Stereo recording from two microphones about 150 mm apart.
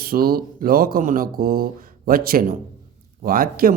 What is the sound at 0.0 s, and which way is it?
Speech, 85° right.